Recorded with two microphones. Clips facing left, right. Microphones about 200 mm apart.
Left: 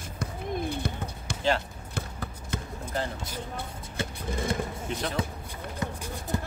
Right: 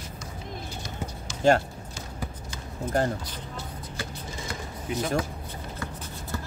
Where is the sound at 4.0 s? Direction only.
25° left (ahead or behind).